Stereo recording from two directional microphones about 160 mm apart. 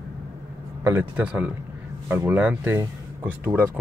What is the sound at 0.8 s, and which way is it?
Speech, 15° right (ahead or behind).